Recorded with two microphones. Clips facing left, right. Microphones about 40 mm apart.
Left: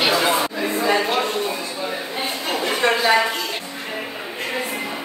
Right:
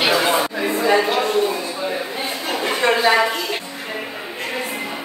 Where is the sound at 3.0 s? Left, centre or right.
Centre.